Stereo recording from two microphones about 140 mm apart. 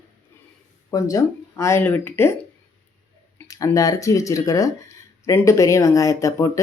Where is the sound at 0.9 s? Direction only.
25° left (ahead or behind).